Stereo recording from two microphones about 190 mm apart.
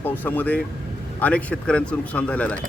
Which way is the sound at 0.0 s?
10° left (ahead or behind).